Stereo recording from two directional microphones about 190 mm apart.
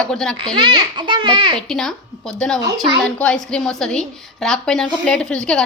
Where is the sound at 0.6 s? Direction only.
25° right (ahead or behind).